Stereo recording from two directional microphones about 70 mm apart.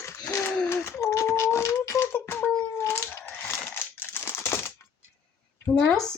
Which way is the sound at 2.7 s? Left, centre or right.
Left.